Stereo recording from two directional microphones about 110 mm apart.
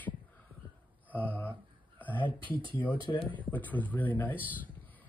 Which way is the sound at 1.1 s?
15° left (ahead or behind).